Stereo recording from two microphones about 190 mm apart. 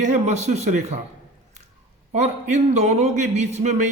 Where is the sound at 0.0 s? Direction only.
40° right (ahead or behind).